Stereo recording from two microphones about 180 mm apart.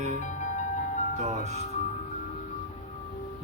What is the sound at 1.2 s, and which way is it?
Speech, 35° right (ahead or behind).